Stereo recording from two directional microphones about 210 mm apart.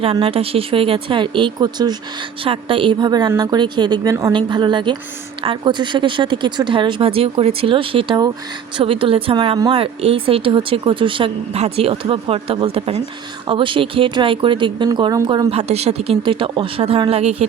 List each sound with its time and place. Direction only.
0.0 s speech: 25° right (ahead or behind)
15.4 s speech: 30° right (ahead or behind)